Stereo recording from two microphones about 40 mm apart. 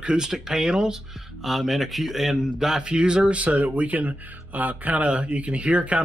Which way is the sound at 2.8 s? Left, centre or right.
Right.